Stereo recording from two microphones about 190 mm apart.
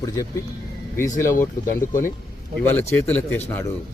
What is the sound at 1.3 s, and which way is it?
Speech, 45° left (ahead or behind).